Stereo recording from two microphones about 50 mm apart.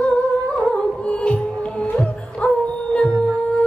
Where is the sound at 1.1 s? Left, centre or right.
Left.